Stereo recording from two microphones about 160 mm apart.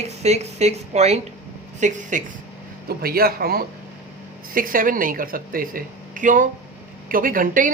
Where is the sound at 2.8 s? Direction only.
70° right (ahead or behind).